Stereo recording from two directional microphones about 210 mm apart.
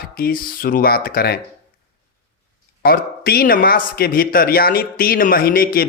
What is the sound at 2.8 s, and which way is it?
Speech, 45° left (ahead or behind).